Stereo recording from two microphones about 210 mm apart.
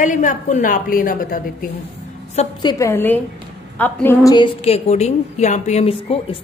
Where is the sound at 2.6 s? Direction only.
20° left (ahead or behind).